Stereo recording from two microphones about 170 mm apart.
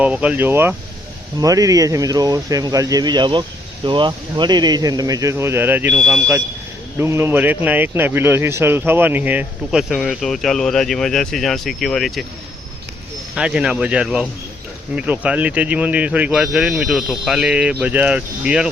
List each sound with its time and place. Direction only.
0.0 s a man's voice: 10° right (ahead or behind)
7.0 s a man's voice: 15° right (ahead or behind)
13.3 s a man's voice: 5° right (ahead or behind)